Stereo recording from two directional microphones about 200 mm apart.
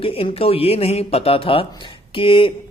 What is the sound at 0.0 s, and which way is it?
A man's voice, 30° left (ahead or behind).